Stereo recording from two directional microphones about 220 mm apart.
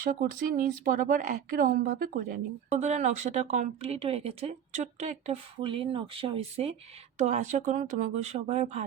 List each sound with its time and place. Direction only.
0.0 s speech: 40° right (ahead or behind)